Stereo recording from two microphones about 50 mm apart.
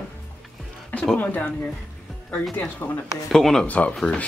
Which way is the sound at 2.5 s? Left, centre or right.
Left.